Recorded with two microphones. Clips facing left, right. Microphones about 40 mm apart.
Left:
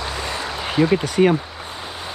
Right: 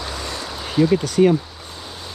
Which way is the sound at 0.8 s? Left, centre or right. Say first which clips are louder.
Right 1 dB; left.